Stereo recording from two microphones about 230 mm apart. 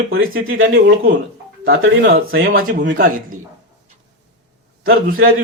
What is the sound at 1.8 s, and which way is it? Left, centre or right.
Speech, right.